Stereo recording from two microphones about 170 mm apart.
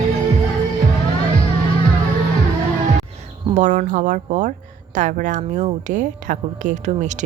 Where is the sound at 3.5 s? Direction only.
45° right (ahead or behind).